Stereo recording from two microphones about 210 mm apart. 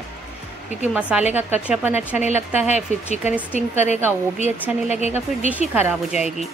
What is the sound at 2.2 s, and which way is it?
Speech, 30° left (ahead or behind).